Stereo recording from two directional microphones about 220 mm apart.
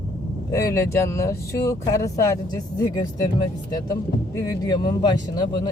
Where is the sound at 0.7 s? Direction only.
10° left (ahead or behind).